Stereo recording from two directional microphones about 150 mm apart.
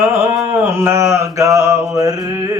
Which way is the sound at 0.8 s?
20° right (ahead or behind).